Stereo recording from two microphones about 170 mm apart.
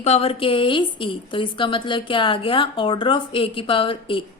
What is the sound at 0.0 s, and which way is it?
A woman's voice, 35° left (ahead or behind).